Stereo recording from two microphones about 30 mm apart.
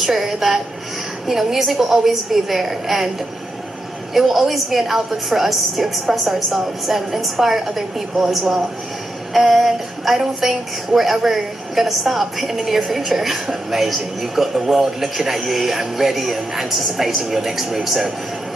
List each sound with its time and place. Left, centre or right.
0.0 s a woman's voice: centre
4.1 s a woman's voice: centre